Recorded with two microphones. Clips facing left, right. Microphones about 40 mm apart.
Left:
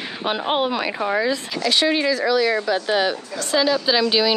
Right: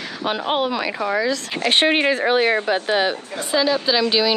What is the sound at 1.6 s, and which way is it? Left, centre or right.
Speech, right.